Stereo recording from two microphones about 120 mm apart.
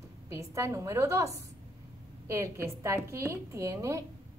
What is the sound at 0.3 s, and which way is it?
A woman's voice, 25° right (ahead or behind).